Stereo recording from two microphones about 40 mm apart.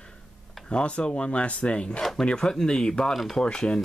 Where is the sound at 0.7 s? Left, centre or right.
Left.